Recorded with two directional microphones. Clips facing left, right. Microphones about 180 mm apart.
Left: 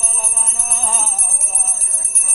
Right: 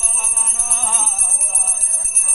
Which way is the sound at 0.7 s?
45° left (ahead or behind).